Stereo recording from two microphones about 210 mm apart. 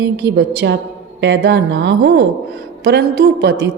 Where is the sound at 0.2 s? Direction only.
55° right (ahead or behind).